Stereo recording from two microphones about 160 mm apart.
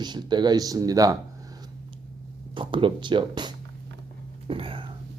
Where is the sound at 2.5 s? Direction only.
30° right (ahead or behind).